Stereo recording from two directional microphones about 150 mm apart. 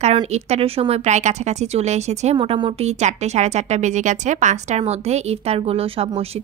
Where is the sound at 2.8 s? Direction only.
50° right (ahead or behind).